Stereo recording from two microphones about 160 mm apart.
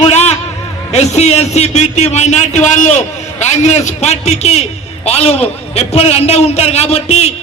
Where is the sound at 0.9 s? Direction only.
45° left (ahead or behind).